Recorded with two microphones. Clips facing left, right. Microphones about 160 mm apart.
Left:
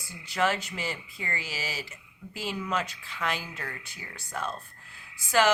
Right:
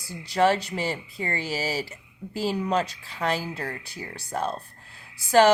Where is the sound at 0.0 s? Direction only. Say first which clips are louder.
Right 6 dB; 35° right (ahead or behind).